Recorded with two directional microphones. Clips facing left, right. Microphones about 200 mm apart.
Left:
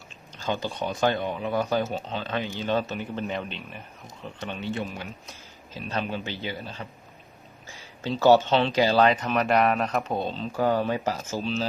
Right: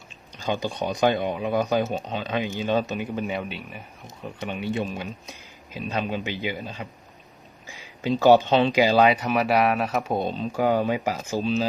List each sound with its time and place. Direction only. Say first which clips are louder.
0.4 s speech: right 2 dB; 15° right (ahead or behind)